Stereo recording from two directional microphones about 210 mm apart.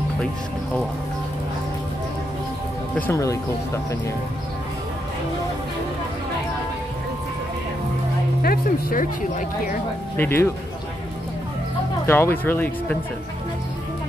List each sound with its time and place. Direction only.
3.0 s speech: 15° left (ahead or behind)
8.4 s speech: 45° left (ahead or behind)
10.1 s speech: 10° left (ahead or behind)
12.1 s speech: 10° left (ahead or behind)